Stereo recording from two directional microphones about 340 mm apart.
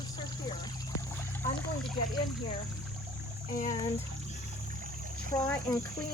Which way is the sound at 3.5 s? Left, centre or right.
Left.